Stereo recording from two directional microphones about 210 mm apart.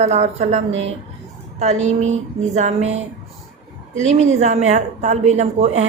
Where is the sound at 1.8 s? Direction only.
35° right (ahead or behind).